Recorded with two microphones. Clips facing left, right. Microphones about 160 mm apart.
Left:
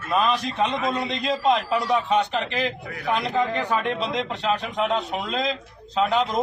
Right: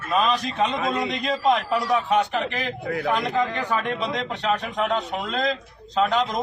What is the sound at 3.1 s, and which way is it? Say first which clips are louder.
A man's voice: even; centre (ahead or behind).